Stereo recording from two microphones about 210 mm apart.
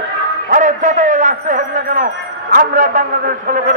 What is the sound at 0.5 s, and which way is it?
A man's voice, 35° right (ahead or behind).